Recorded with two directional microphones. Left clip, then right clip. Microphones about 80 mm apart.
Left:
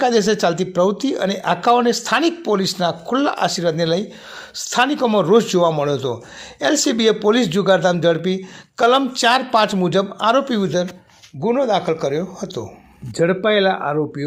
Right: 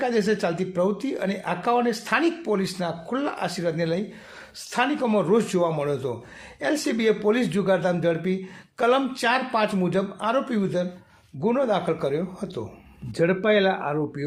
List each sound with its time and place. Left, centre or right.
0.0 s speech: left
4.9 s speech: left
11.3 s speech: left